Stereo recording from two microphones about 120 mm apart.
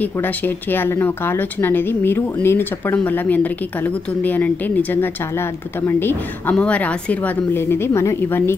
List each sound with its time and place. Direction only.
0.0 s speech: 15° left (ahead or behind)